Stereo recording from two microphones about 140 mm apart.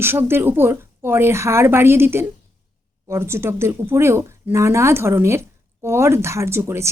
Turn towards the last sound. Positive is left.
turn(degrees=-20)  # may be behind; listen again after turning